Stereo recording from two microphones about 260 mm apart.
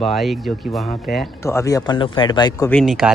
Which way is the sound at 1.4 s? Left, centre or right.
Centre.